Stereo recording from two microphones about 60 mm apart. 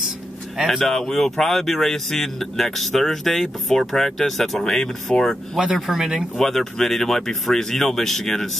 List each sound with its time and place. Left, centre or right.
0.7 s speech: centre
5.6 s speech: centre
6.3 s speech: centre